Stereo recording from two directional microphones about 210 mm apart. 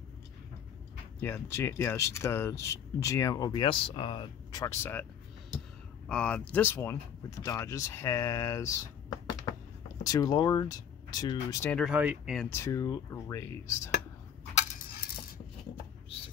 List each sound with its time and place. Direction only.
1.2 s speech: 10° left (ahead or behind)
6.0 s speech: 5° left (ahead or behind)
11.7 s speech: 5° right (ahead or behind)
12.4 s speech: 15° left (ahead or behind)